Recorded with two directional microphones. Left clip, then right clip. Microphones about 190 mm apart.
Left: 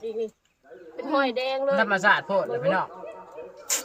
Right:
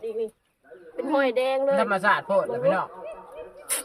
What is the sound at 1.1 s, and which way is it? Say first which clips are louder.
Speech: right 2 dB; 35° right (ahead or behind).